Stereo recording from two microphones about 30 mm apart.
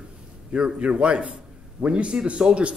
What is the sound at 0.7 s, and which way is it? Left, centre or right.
A man's voice, right.